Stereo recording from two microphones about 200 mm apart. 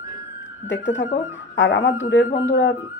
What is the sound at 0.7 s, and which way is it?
Speech, 65° left (ahead or behind).